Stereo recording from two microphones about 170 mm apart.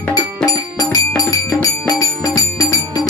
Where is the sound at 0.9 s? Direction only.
20° left (ahead or behind).